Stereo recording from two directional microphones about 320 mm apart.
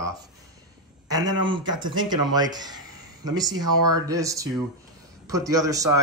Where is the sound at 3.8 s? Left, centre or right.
Right.